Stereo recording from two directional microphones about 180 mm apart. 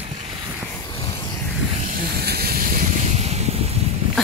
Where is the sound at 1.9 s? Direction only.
60° right (ahead or behind).